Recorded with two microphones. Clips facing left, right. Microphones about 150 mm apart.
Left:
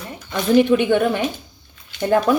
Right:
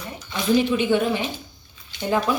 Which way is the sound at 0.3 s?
55° left (ahead or behind).